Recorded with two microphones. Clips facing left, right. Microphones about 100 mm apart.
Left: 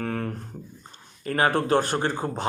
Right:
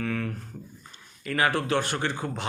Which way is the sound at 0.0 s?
45° left (ahead or behind).